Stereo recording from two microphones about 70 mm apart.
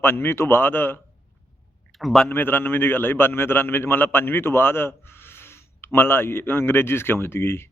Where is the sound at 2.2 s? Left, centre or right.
Left.